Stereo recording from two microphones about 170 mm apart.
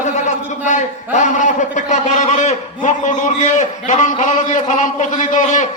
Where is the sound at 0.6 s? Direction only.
45° left (ahead or behind).